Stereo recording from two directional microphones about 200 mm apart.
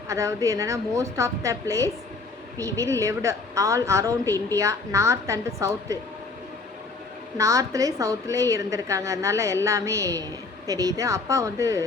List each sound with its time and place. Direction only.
0.1 s a woman's voice: 15° right (ahead or behind)
7.3 s a woman's voice: 15° right (ahead or behind)